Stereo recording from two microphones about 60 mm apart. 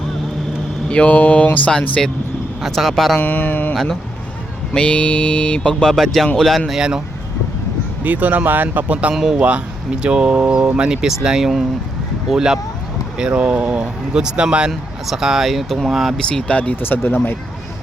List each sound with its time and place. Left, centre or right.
0.9 s mantra: left
2.0 s speech: centre
3.2 s speech: left
4.7 s mantra: centre
5.9 s speech: centre
6.7 s speech: centre
8.0 s speech: right
14.7 s speech: centre
16.1 s mantra: centre
16.8 s speech: left